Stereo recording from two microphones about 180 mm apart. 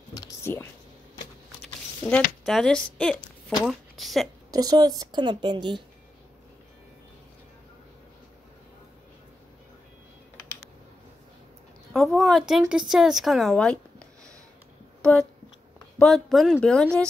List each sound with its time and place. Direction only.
0.1 s a sound: 20° left (ahead or behind)
2.4 s speech: 5° left (ahead or behind)
4.5 s a woman's voice: 20° right (ahead or behind)
11.9 s a woman's voice: centre (ahead or behind)
16.0 s speech: centre (ahead or behind)